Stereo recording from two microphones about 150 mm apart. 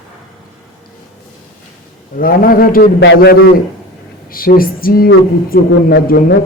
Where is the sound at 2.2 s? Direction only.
75° left (ahead or behind).